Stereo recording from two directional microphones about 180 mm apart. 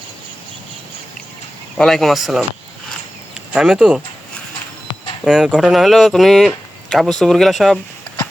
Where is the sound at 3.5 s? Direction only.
5° right (ahead or behind).